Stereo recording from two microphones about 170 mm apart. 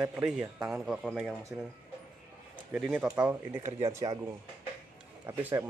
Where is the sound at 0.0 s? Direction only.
5° right (ahead or behind).